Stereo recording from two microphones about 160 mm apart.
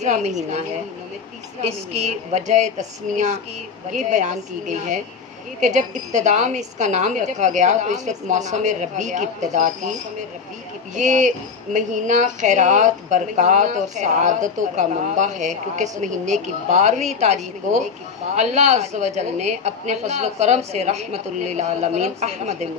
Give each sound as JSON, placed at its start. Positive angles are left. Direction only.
{"t": 0.0, "sound": "a woman's voice", "side_deg": -45}
{"t": 1.6, "sound": "a woman's voice", "side_deg": -40}
{"t": 10.9, "sound": "a woman's voice", "side_deg": -50}